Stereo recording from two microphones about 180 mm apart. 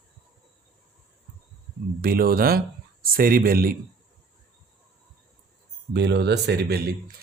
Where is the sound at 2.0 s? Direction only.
55° right (ahead or behind).